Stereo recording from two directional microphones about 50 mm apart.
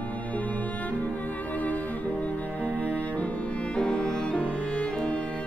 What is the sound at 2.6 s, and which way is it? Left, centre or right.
Music, right.